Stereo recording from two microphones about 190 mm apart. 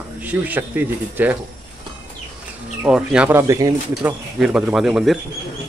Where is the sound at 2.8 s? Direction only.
5° right (ahead or behind).